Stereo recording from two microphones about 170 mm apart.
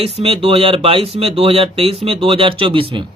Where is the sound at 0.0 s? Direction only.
35° right (ahead or behind).